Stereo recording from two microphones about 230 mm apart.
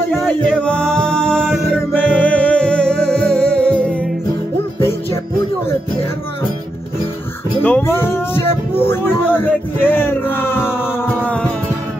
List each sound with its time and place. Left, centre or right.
0.1 s music: centre
7.6 s speech: centre